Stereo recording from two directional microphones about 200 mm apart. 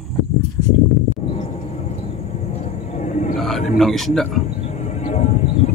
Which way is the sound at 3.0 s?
35° left (ahead or behind).